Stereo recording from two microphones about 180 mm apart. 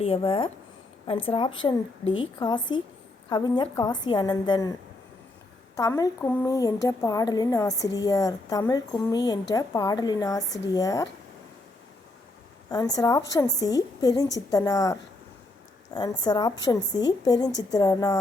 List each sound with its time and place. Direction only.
0.0 s a woman's voice: 30° left (ahead or behind)
5.7 s a woman's voice: 20° left (ahead or behind)
12.7 s a woman's voice: 20° left (ahead or behind)